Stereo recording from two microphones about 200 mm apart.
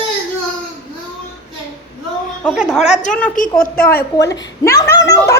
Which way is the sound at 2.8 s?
35° left (ahead or behind).